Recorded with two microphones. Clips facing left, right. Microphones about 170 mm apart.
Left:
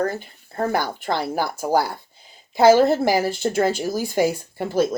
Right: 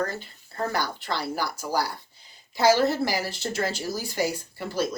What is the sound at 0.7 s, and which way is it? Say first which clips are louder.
Speech: left 7 dB; 50° left (ahead or behind).